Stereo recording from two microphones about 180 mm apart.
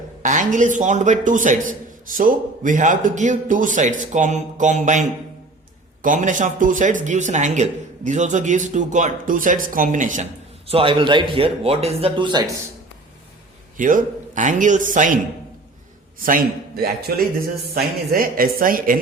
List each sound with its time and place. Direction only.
0.2 s a man's voice: 45° right (ahead or behind)
10.7 s speech: 30° right (ahead or behind)
13.7 s a man's voice: 45° right (ahead or behind)